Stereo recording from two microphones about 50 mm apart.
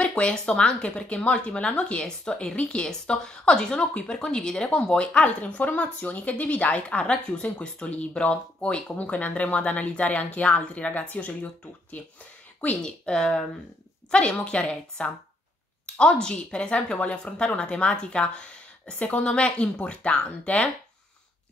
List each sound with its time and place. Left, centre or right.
0.0 s a sound: left
0.3 s speech: centre
12.8 s speech: centre